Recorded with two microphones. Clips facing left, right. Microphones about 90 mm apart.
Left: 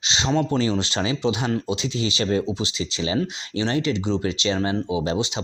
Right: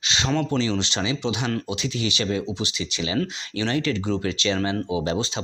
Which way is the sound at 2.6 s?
25° left (ahead or behind).